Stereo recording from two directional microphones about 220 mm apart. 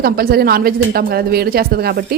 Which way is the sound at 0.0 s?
45° right (ahead or behind).